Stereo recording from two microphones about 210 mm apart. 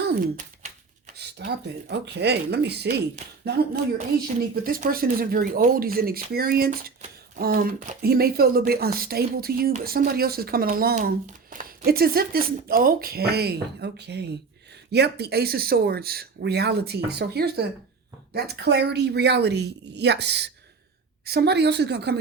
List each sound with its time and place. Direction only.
0.0 s a sound: 40° right (ahead or behind)
1.2 s speech: 55° right (ahead or behind)
4.6 s speech: 45° right (ahead or behind)